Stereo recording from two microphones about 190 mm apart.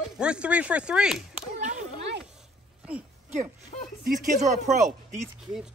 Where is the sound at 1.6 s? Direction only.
40° right (ahead or behind).